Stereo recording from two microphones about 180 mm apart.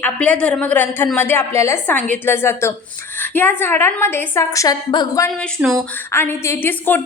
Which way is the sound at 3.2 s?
10° left (ahead or behind).